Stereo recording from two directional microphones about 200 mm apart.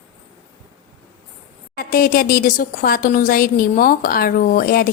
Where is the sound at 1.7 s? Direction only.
50° left (ahead or behind).